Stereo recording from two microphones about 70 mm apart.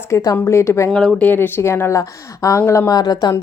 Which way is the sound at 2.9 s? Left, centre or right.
Left.